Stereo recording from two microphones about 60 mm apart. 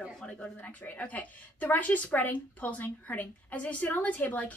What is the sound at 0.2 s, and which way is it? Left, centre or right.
A woman's voice, centre.